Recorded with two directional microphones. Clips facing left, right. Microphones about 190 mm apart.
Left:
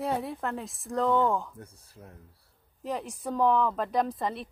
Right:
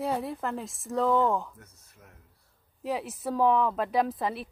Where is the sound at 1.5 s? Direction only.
30° left (ahead or behind).